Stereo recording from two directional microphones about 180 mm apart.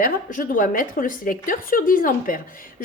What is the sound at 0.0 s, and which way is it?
A woman's voice, 50° left (ahead or behind).